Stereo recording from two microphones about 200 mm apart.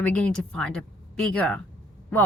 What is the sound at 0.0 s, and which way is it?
A woman's voice, 5° left (ahead or behind).